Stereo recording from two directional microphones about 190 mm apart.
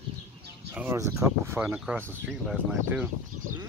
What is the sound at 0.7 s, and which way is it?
Speech, 15° right (ahead or behind).